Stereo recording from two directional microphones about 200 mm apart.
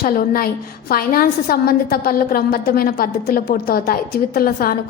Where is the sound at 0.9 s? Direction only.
45° left (ahead or behind).